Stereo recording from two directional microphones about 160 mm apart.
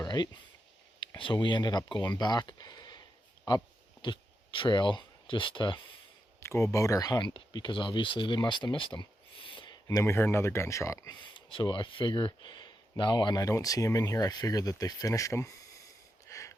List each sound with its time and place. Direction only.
0.0 s a sound: 25° left (ahead or behind)
0.9 s speech: 30° left (ahead or behind)
4.0 s speech: 30° left (ahead or behind)
6.4 s speech: 15° left (ahead or behind); by 9.7 s 30° left (ahead or behind)
9.8 s speech: 20° left (ahead or behind)
16.2 s a sound: 20° left (ahead or behind)